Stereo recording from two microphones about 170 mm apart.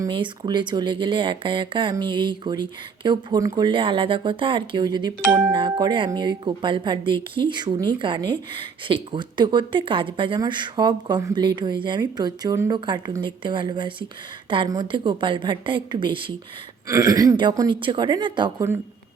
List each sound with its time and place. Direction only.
0.1 s speech: 25° right (ahead or behind)